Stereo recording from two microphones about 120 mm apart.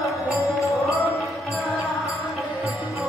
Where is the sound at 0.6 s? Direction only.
25° left (ahead or behind).